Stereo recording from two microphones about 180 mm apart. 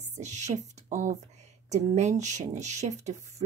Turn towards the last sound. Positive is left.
turn(degrees=-40)  # may be behind; listen again after turning